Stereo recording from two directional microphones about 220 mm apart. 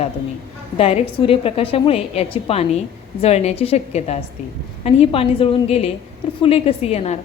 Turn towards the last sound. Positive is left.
turn(degrees=30)  # may be behind; listen again after turning